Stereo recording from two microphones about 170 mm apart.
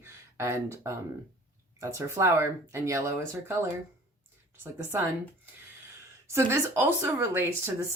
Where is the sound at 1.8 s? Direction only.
15° right (ahead or behind).